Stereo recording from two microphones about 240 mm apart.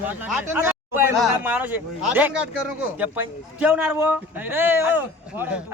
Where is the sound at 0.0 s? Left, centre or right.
Centre.